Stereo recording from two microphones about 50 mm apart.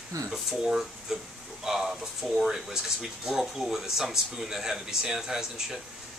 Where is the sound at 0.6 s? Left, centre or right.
Centre.